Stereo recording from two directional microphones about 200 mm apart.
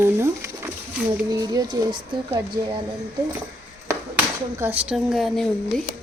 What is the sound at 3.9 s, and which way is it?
Speech, 10° right (ahead or behind).